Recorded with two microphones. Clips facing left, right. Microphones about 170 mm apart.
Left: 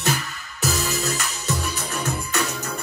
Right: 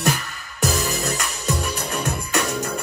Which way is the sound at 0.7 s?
35° right (ahead or behind).